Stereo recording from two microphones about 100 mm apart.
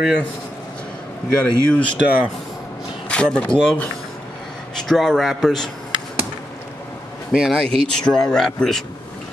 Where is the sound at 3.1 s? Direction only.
10° left (ahead or behind).